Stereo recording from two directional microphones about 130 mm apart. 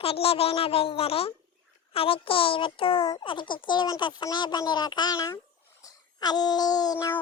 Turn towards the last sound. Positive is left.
turn(degrees=25)  # may be behind; listen again after turning